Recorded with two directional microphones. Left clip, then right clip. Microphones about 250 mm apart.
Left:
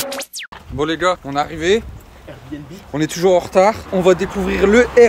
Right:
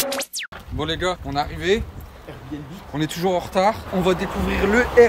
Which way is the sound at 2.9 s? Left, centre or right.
Centre.